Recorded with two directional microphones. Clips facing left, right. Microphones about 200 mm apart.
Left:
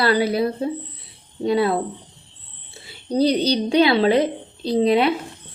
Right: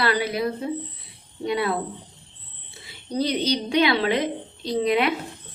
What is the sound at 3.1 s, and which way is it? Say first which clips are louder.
A woman's voice: left 5 dB; 35° left (ahead or behind).